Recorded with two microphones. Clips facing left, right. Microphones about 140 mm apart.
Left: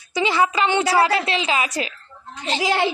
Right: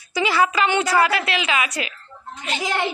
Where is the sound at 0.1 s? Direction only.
20° left (ahead or behind).